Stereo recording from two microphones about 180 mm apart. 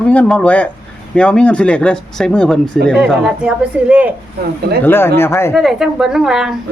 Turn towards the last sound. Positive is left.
turn(degrees=-5)  # may be behind; listen again after turning